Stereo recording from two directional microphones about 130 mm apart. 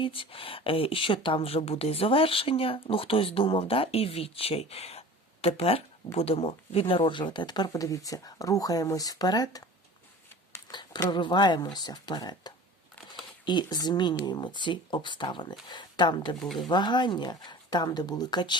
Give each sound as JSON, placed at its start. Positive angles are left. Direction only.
{"t": 0.0, "sound": "speech", "side_deg": 45}
{"t": 10.5, "sound": "a sound", "side_deg": 35}
{"t": 11.1, "sound": "speech", "side_deg": 35}
{"t": 16.4, "sound": "speech", "side_deg": 0}
{"t": 16.6, "sound": "speech", "side_deg": 35}